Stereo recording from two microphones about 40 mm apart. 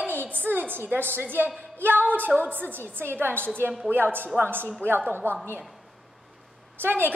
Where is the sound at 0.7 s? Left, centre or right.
Right.